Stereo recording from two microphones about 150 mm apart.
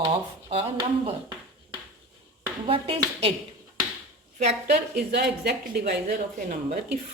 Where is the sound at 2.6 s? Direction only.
40° right (ahead or behind).